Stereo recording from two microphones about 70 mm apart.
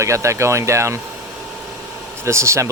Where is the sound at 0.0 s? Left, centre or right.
Right.